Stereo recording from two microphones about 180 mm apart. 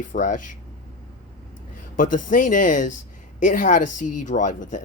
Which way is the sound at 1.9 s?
50° left (ahead or behind).